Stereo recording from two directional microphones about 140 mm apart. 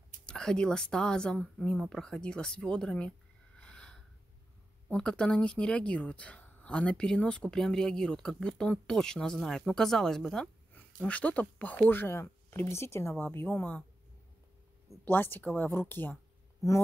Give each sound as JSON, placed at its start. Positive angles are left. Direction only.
{"t": 0.3, "sound": "speech", "side_deg": 5}
{"t": 3.5, "sound": "snort", "side_deg": 5}
{"t": 4.8, "sound": "speech", "side_deg": 10}
{"t": 15.0, "sound": "speech", "side_deg": 15}